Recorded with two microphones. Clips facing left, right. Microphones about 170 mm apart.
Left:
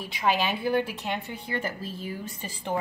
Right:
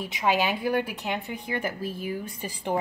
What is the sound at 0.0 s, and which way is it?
Speech, 20° right (ahead or behind).